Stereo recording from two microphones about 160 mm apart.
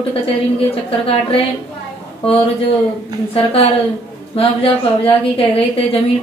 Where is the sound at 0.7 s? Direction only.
35° left (ahead or behind).